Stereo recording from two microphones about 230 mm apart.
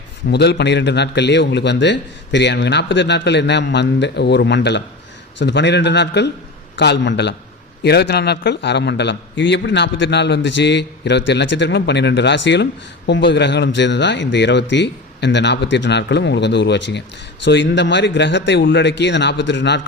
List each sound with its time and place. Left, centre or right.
0.3 s a man's voice: left